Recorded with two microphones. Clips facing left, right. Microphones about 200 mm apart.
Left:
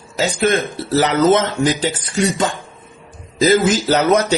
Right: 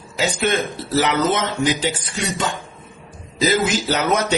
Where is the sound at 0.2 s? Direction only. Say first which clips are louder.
Left 3 dB; 40° left (ahead or behind).